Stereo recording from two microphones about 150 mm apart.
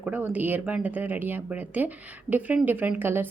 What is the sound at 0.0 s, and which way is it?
A woman's voice, 10° right (ahead or behind).